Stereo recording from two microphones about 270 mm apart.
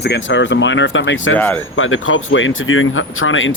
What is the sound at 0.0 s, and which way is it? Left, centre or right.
Speech, left.